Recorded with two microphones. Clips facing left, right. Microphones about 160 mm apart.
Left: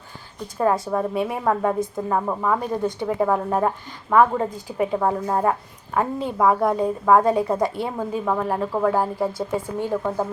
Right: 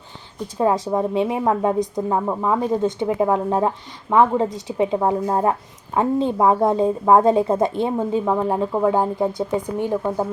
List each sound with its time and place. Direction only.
0.4 s a woman's voice: 15° right (ahead or behind)